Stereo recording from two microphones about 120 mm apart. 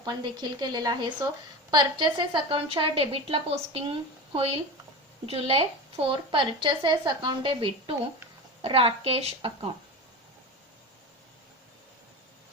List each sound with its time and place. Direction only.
0.0 s a woman's voice: 35° right (ahead or behind); by 9.5 s 55° right (ahead or behind)